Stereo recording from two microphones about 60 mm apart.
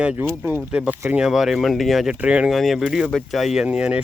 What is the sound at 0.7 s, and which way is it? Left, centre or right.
Speech, right.